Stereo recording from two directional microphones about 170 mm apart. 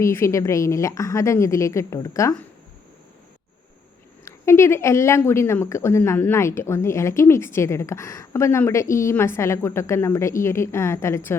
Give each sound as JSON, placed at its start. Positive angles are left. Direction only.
{"t": 0.0, "sound": "a woman's voice", "side_deg": 15}
{"t": 4.3, "sound": "a woman's voice", "side_deg": 15}